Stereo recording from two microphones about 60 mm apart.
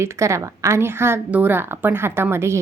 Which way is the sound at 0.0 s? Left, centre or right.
Right.